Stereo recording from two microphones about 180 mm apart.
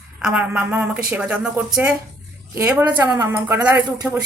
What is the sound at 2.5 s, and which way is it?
Speech, 15° right (ahead or behind).